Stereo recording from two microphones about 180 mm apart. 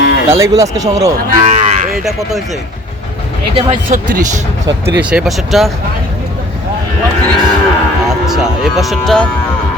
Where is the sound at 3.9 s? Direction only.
50° right (ahead or behind).